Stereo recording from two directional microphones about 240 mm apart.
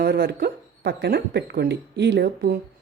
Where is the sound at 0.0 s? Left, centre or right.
Right.